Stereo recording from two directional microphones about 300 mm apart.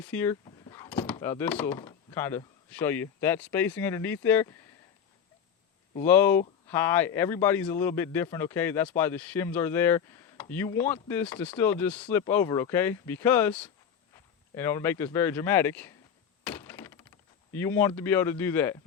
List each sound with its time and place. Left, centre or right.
0.0 s a man's voice: centre
6.0 s a man's voice: centre
16.4 s thunk: centre
17.5 s a man's voice: centre